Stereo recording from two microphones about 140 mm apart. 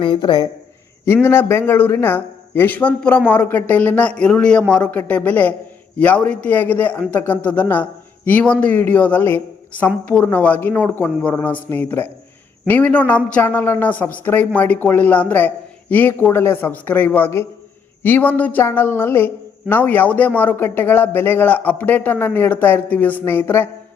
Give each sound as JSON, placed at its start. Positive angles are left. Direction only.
{"t": 0.0, "sound": "a man's voice", "side_deg": 35}
{"t": 1.0, "sound": "a woman's voice", "side_deg": 15}